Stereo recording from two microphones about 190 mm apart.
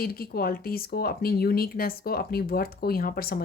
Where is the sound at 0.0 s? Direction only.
50° left (ahead or behind).